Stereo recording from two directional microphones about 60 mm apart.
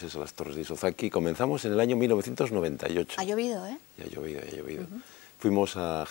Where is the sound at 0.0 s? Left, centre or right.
Centre.